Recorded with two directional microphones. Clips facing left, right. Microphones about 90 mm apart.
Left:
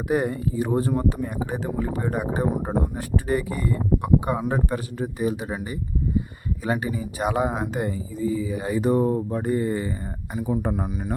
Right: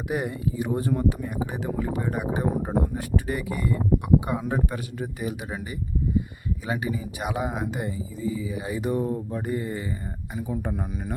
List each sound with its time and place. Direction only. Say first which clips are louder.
0.1 s speech: left 5 dB; 40° left (ahead or behind)
6.7 s speech: left 3 dB; 35° left (ahead or behind)
10.8 s speech: left 3 dB; 15° left (ahead or behind)